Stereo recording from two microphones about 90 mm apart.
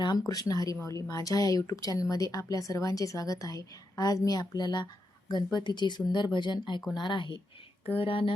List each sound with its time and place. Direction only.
0.3 s speech: 40° left (ahead or behind); by 7.4 s 60° left (ahead or behind)
7.9 s speech: 85° left